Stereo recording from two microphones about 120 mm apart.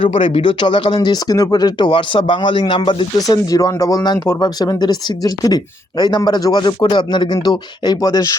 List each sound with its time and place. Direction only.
0.0 s speech: 45° left (ahead or behind)
3.2 s speech: 30° left (ahead or behind)